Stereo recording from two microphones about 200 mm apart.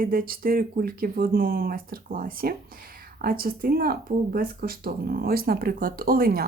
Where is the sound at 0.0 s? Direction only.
45° right (ahead or behind).